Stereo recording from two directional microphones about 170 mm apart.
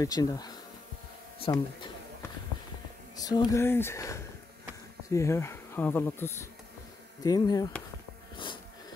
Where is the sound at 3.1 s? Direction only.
20° left (ahead or behind).